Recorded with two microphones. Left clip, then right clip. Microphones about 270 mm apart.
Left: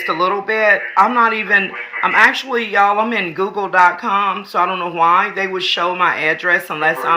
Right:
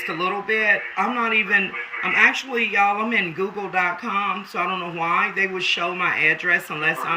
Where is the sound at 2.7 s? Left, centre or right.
Centre.